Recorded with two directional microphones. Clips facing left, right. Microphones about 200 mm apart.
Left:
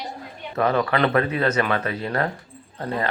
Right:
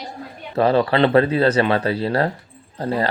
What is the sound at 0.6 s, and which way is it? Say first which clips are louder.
Speech: right 5 dB; 30° right (ahead or behind).